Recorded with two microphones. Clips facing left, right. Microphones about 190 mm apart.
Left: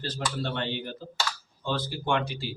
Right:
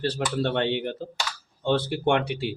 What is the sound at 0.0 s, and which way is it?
Speech, 70° right (ahead or behind).